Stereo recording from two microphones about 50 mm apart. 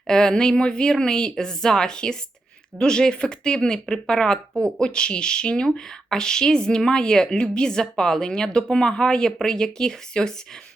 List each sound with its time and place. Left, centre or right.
0.1 s speech: centre